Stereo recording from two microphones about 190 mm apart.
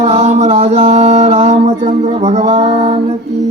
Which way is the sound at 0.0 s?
35° right (ahead or behind).